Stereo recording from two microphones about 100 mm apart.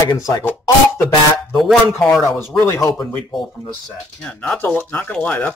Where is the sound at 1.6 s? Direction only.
Centre (ahead or behind).